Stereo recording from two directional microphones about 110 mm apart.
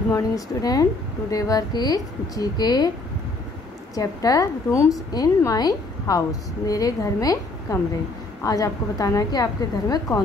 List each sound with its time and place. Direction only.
0.1 s a woman's voice: 35° left (ahead or behind)
3.9 s a woman's voice: 35° left (ahead or behind)